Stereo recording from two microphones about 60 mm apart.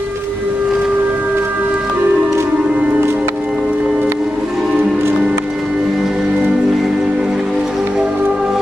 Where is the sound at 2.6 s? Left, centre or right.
Centre.